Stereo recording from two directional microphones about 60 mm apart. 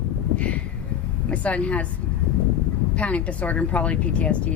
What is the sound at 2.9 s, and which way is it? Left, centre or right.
A woman's voice, left.